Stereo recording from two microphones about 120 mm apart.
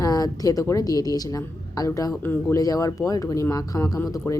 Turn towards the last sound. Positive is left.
turn(degrees=25)  # may be behind; listen again after turning